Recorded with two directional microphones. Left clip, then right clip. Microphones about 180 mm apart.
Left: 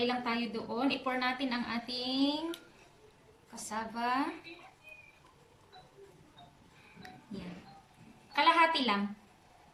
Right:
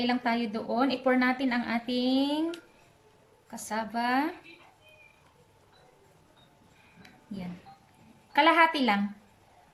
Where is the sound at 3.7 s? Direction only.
45° right (ahead or behind).